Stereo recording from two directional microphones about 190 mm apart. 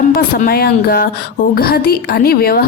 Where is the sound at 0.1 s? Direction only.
50° left (ahead or behind).